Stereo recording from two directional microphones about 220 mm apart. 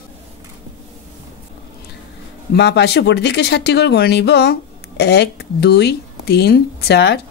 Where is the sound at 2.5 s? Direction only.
50° left (ahead or behind).